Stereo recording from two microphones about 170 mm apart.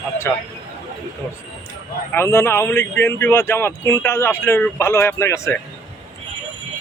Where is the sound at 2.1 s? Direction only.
15° left (ahead or behind).